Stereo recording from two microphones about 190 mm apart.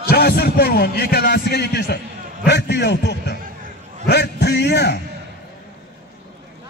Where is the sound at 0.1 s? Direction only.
55° left (ahead or behind).